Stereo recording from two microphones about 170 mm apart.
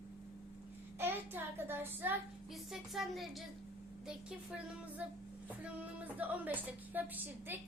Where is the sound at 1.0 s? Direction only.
10° right (ahead or behind).